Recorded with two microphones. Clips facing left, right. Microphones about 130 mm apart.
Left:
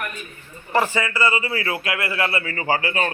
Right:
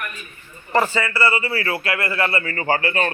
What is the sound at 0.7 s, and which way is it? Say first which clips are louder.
A man's voice: right 1 dB; 10° left (ahead or behind).